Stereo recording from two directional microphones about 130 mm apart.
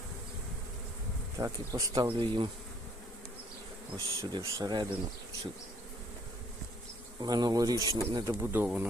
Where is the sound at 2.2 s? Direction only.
40° right (ahead or behind).